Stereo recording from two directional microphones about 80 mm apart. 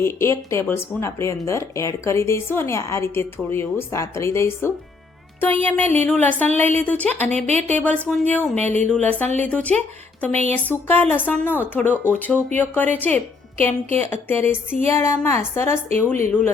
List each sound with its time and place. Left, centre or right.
0.0 s a woman's voice: left